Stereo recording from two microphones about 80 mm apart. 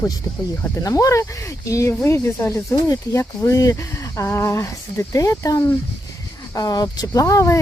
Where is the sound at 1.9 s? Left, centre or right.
Left.